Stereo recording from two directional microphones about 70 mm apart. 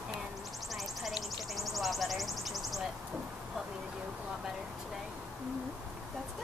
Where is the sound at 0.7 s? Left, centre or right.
Centre.